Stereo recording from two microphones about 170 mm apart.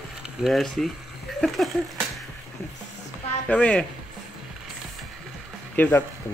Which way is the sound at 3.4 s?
5° left (ahead or behind).